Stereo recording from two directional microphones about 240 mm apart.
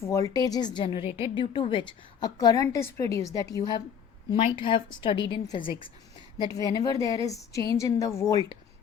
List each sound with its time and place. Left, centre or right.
0.0 s a woman's voice: centre